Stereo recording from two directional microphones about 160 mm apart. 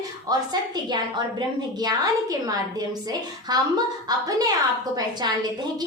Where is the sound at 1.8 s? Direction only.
25° right (ahead or behind).